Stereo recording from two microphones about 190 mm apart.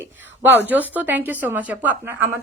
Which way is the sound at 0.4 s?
10° right (ahead or behind).